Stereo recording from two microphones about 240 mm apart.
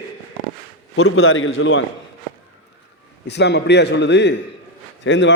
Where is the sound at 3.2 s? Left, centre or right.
Left.